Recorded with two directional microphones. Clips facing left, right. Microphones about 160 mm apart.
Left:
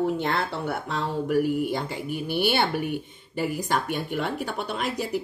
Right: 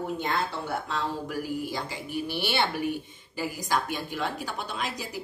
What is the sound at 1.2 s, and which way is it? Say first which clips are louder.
A woman's voice: left 8 dB; 55° left (ahead or behind).